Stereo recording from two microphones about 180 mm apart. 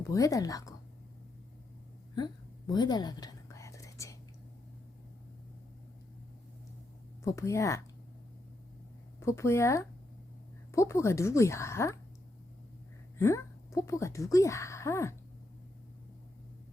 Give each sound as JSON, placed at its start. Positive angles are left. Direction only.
{"t": 0.1, "sound": "a woman's voice", "side_deg": 20}
{"t": 2.1, "sound": "whispering", "side_deg": 25}
{"t": 7.3, "sound": "a woman's voice", "side_deg": 15}
{"t": 9.2, "sound": "a woman's voice", "side_deg": 15}
{"t": 13.1, "sound": "speech", "side_deg": 15}